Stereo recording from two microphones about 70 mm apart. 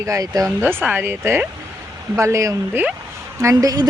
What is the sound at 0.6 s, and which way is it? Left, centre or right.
Speech, right.